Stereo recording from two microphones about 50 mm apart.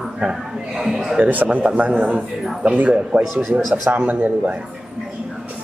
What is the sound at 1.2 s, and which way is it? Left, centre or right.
A man's voice, right.